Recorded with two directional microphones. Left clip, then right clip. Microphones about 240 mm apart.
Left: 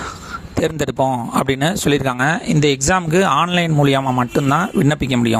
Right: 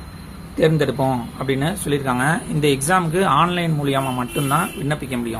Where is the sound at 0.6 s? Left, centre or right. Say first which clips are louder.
Even; left.